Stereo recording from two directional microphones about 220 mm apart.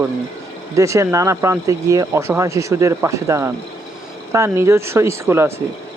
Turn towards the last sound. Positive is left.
turn(degrees=-10)  # may be behind; listen again after turning